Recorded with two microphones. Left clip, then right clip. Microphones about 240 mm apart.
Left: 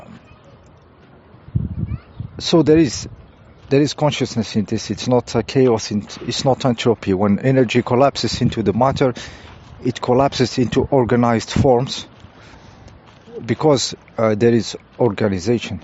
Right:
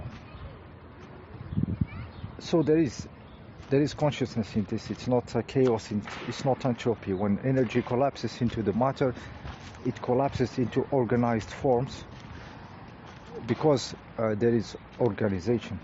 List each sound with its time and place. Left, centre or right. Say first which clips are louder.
2.4 s speech: left 11 dB; left
13.4 s speech: left 9 dB; left